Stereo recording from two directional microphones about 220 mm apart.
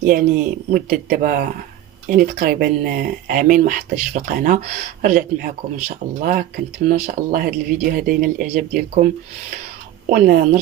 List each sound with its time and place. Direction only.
0.0 s speech: 40° right (ahead or behind)
10.1 s speech: 40° right (ahead or behind)